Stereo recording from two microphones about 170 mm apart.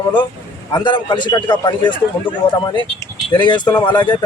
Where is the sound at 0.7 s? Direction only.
25° left (ahead or behind).